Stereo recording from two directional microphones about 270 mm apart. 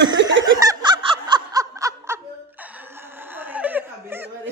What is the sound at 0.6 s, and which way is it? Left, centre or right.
Snicker, centre.